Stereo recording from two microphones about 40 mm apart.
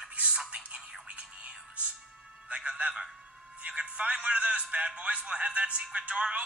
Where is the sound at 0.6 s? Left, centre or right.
Right.